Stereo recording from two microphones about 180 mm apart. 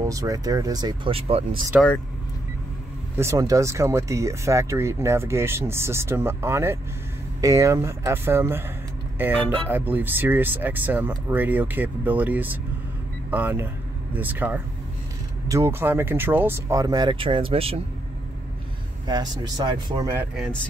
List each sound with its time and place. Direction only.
0.0 s speech: 20° right (ahead or behind)
3.2 s speech: 15° right (ahead or behind)
19.0 s speech: 20° right (ahead or behind)